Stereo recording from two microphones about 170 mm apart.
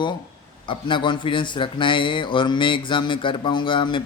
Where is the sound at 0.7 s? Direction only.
30° left (ahead or behind).